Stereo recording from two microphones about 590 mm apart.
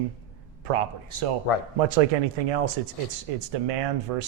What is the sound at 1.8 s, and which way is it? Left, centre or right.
Speech, right.